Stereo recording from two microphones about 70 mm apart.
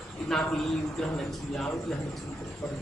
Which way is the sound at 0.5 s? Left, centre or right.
Centre.